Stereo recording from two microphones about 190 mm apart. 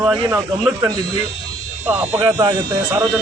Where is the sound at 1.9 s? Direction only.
15° right (ahead or behind).